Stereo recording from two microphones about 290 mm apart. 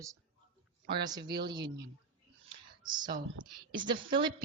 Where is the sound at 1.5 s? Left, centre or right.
Centre.